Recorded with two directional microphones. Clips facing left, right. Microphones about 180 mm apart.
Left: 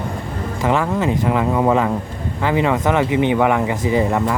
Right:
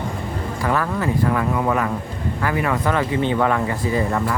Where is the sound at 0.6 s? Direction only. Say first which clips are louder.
Left 4 dB; 25° left (ahead or behind).